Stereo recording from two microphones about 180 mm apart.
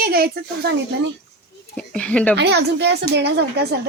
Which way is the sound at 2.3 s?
70° right (ahead or behind).